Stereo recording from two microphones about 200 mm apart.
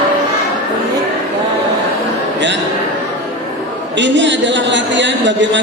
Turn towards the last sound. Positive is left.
turn(degrees=-65)  # may be behind; listen again after turning